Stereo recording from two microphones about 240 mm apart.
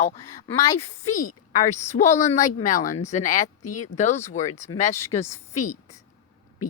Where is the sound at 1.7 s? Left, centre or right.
Left.